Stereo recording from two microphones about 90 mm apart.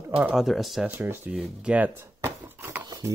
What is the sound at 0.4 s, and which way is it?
Speech, centre (ahead or behind).